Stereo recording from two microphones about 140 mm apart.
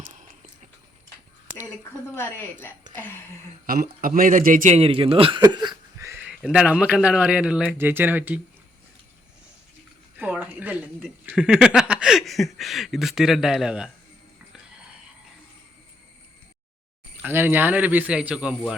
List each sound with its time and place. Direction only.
0.0 s a sound: 60° right (ahead or behind)
1.8 s a woman's voice: 15° left (ahead or behind)
3.7 s speech: 90° right; by 4.8 s 70° right (ahead or behind)
4.8 s speech: 40° right (ahead or behind)
6.1 s a man's voice: 10° right (ahead or behind)
10.2 s a sound: 10° right (ahead or behind)
11.3 s speech: 5° right (ahead or behind)
17.2 s a man's voice: 15° right (ahead or behind)